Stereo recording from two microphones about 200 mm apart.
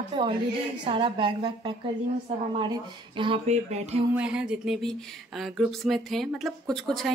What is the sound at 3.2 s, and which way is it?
Speech, 30° right (ahead or behind).